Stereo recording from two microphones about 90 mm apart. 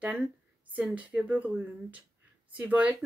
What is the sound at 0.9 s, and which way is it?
Speech, 15° right (ahead or behind).